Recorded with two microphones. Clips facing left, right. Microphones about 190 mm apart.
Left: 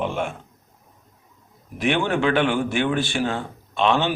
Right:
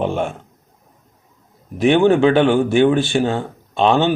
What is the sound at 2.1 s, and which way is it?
Speech, 35° right (ahead or behind).